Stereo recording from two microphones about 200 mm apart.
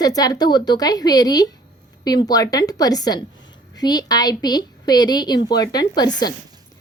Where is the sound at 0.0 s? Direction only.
20° left (ahead or behind).